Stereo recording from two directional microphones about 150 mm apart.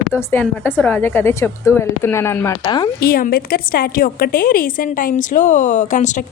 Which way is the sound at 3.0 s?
80° left.